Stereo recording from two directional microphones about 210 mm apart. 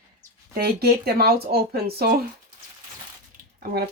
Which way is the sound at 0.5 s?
50° right (ahead or behind).